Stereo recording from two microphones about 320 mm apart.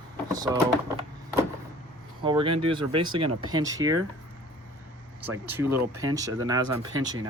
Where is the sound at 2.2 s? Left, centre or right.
Centre.